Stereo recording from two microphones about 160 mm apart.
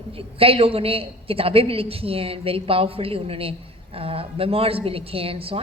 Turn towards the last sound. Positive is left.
turn(degrees=-35)  # may be behind; listen again after turning